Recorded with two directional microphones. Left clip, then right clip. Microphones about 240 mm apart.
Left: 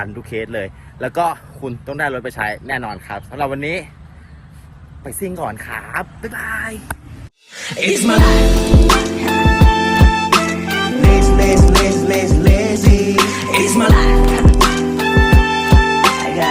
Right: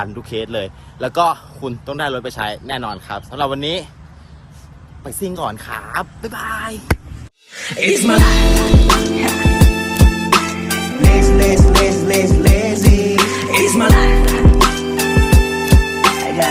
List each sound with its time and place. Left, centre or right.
0.0 s speech: centre
5.5 s speech: centre
7.5 s music: centre